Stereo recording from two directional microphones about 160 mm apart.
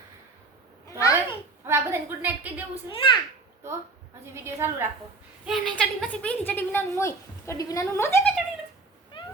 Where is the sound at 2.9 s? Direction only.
35° left (ahead or behind).